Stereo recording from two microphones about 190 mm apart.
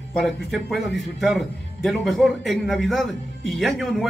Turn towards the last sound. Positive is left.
turn(degrees=0)  # may be behind; listen again after turning